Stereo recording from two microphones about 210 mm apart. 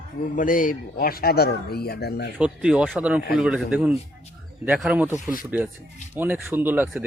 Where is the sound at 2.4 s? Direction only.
5° right (ahead or behind).